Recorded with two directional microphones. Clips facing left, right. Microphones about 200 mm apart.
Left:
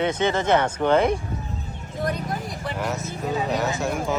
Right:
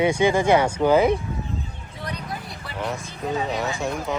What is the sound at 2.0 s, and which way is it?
Vehicle, 45° left (ahead or behind).